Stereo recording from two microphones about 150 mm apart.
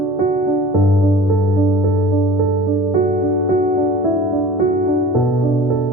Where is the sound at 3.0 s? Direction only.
80° right.